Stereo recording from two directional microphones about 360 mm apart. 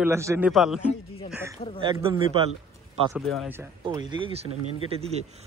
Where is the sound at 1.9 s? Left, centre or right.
Centre.